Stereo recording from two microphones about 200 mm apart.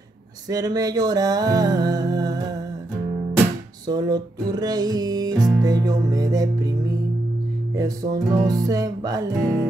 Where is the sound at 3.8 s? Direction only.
20° right (ahead or behind).